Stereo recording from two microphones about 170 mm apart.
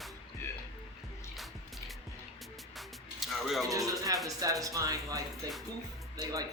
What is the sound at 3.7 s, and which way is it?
Speech, 20° right (ahead or behind).